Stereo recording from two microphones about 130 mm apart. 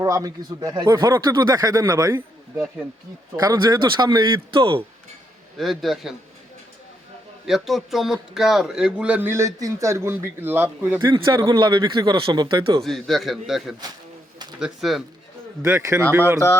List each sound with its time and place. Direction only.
0.0 s speech: 25° right (ahead or behind)
3.3 s speech: 25° right (ahead or behind)
5.5 s a man's voice: centre (ahead or behind)
7.4 s speech: centre (ahead or behind)
11.0 s speech: 35° right (ahead or behind)
12.8 s a man's voice: centre (ahead or behind)
15.6 s speech: 25° right (ahead or behind)